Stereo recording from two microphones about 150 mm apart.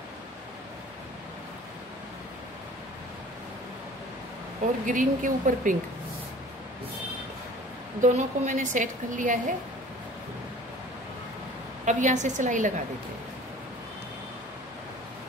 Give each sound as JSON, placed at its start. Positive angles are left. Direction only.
{"t": 4.8, "sound": "a woman's voice", "side_deg": -60}
{"t": 8.0, "sound": "a woman's voice", "side_deg": -55}
{"t": 11.8, "sound": "a woman's voice", "side_deg": -55}